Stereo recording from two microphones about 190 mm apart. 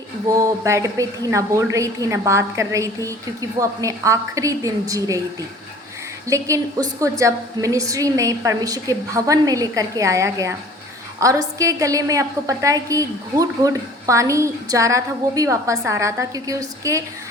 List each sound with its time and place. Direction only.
0.3 s a woman's voice: 15° right (ahead or behind)
6.2 s a woman's voice: 15° right (ahead or behind)